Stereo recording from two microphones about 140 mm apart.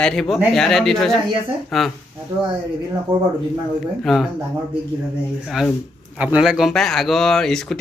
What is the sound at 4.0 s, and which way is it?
Speech, centre (ahead or behind).